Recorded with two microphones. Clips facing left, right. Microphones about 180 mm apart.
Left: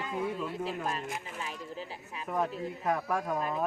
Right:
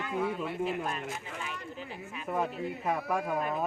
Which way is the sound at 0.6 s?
35° left (ahead or behind).